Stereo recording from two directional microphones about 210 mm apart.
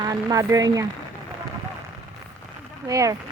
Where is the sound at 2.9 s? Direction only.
15° right (ahead or behind).